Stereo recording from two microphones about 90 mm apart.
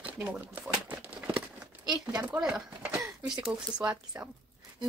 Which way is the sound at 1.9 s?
45° right (ahead or behind).